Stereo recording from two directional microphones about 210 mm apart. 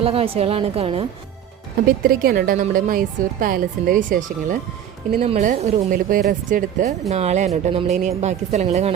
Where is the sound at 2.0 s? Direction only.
45° right (ahead or behind).